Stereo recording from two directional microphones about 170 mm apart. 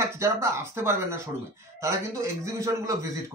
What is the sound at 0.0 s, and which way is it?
A man's voice, 15° right (ahead or behind).